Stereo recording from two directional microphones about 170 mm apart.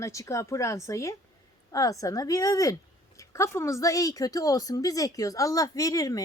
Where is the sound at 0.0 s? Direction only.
20° left (ahead or behind).